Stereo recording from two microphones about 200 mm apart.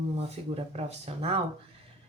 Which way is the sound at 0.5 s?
30° right (ahead or behind).